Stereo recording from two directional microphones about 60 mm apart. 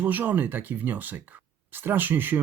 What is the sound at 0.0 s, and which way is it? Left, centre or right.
Speech, right.